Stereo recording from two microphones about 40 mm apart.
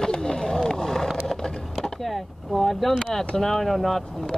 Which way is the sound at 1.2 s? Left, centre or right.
Centre.